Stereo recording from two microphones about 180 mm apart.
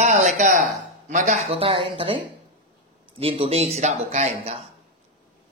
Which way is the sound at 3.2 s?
30° right (ahead or behind).